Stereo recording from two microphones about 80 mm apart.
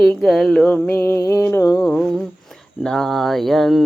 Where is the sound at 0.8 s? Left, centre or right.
Left.